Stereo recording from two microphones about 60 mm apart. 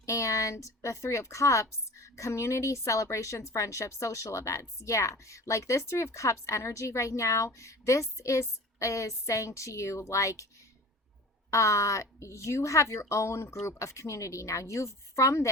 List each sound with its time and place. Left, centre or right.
0.0 s a woman's voice: left
11.5 s speech: left